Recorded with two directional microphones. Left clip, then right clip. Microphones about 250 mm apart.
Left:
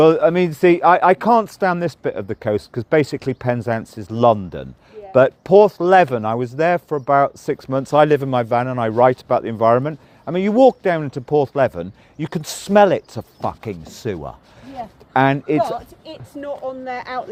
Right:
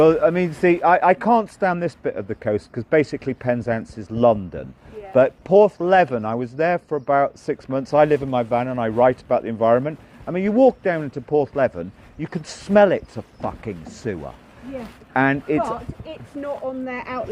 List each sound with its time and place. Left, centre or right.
0.0 s speech: left
16.0 s speech: centre